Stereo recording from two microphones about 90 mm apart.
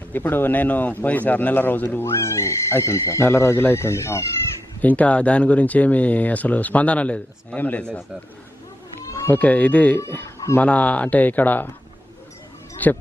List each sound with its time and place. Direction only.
0.1 s a man's voice: 20° left (ahead or behind)
4.8 s speech: 15° left (ahead or behind)
9.3 s speech: 15° left (ahead or behind)
10.0 s speech: 30° left (ahead or behind)
10.6 s speech: 15° left (ahead or behind)
12.8 s a man's voice: 20° left (ahead or behind)